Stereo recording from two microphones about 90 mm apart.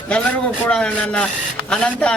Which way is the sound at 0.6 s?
15° left (ahead or behind).